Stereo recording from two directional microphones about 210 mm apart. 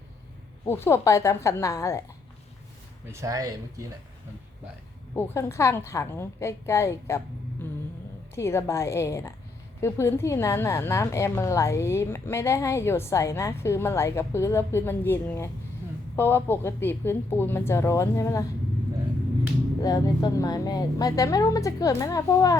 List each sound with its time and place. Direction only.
0.6 s a woman's voice: 10° left (ahead or behind)
3.1 s speech: 15° right (ahead or behind)
5.1 s a woman's voice: 10° left (ahead or behind)
8.4 s a woman's voice: 10° left (ahead or behind)
19.8 s a woman's voice: 15° left (ahead or behind)